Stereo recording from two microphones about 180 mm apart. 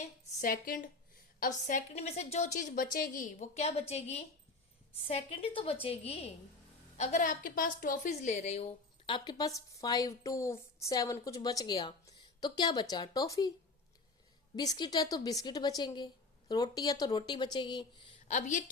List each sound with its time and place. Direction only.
0.0 s a sound: 50° left (ahead or behind)
1.4 s a woman's voice: 45° left (ahead or behind)
9.0 s speech: 25° left (ahead or behind)
14.5 s speech: 20° left (ahead or behind)
18.3 s a woman's voice: 45° left (ahead or behind)